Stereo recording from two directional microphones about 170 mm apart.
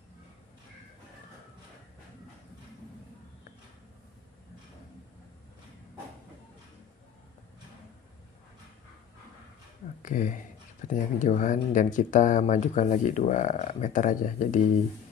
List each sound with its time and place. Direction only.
10.0 s speech: 50° left (ahead or behind)